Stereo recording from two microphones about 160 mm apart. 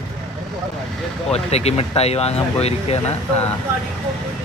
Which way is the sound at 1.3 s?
40° left (ahead or behind).